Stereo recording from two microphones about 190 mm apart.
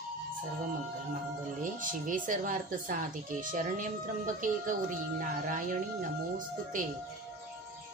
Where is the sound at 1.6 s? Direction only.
45° right (ahead or behind).